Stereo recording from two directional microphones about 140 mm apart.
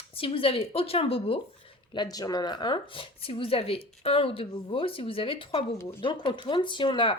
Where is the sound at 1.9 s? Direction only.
30° left (ahead or behind).